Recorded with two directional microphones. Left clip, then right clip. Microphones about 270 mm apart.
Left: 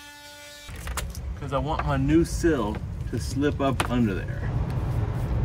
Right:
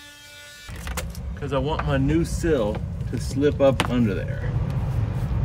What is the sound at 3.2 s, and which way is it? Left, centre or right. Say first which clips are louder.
Speech: right 6 dB; centre.